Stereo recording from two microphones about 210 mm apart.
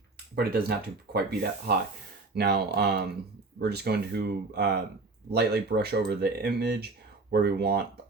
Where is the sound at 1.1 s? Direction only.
50° right (ahead or behind).